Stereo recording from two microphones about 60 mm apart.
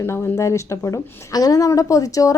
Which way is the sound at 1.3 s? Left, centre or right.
Left.